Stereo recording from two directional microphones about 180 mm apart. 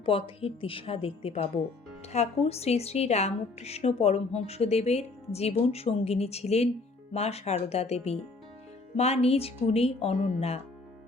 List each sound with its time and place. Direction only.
0.0 s a woman's voice: 30° left (ahead or behind)